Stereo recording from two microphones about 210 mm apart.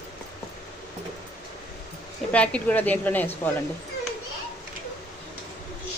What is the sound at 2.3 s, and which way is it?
A woman's voice, 5° left (ahead or behind).